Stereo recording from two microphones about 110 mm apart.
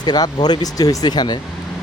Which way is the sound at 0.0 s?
40° left (ahead or behind).